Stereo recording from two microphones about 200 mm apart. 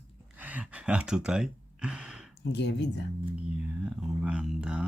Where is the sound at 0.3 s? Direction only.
10° right (ahead or behind).